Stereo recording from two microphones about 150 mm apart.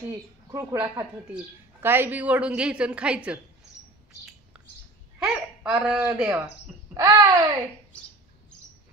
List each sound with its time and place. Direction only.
0.1 s a woman's voice: 25° right (ahead or behind); by 3.3 s 5° right (ahead or behind)
4.6 s bird: 5° right (ahead or behind)
5.2 s speech: 5° right (ahead or behind)
6.9 s speech: 25° right (ahead or behind)